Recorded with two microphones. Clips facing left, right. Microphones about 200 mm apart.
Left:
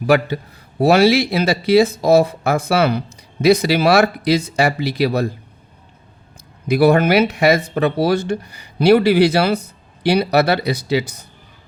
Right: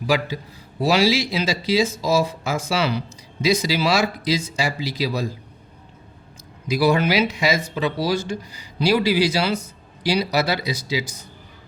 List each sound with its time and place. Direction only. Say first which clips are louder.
0.0 s speech: left 7 dB; 60° left (ahead or behind)
6.7 s speech: left 6 dB; 60° left (ahead or behind)